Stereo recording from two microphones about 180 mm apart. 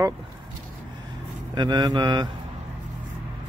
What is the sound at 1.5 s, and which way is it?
Speech, 25° right (ahead or behind).